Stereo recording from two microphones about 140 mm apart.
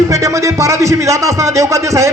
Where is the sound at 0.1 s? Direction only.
25° right (ahead or behind).